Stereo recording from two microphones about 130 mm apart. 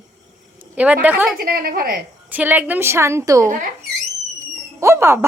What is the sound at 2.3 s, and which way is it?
A woman's voice, 10° right (ahead or behind).